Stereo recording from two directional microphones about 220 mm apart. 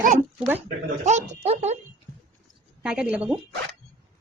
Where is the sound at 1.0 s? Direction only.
30° right (ahead or behind).